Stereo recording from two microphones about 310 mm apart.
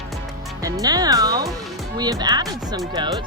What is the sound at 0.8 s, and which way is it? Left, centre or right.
Speech, centre.